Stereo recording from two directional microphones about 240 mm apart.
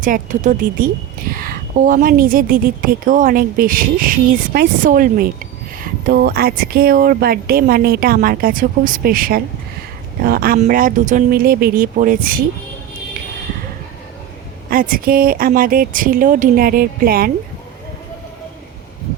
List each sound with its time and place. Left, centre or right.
0.0 s speech: right
14.7 s speech: right